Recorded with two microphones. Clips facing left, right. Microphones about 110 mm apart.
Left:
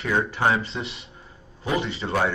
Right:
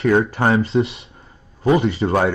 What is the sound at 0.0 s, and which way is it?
Speech, 35° right (ahead or behind).